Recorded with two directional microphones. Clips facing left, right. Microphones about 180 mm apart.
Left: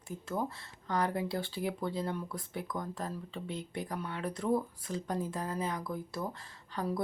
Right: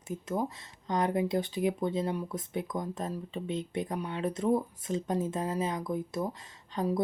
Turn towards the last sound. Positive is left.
turn(degrees=-20)  # may be behind; listen again after turning